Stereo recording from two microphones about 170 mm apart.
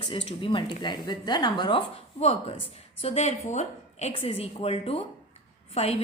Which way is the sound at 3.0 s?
40° left (ahead or behind).